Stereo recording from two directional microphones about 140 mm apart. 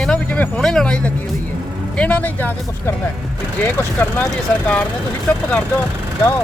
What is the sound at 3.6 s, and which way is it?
Speech, 15° left (ahead or behind).